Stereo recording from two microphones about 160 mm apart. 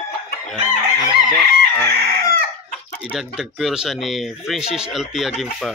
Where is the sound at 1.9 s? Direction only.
85° right.